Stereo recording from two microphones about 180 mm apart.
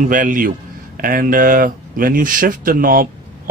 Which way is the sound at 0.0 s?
45° right (ahead or behind).